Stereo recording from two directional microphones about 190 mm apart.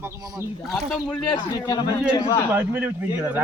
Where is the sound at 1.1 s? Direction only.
20° left (ahead or behind).